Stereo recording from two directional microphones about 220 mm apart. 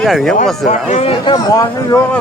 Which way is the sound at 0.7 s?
30° left (ahead or behind).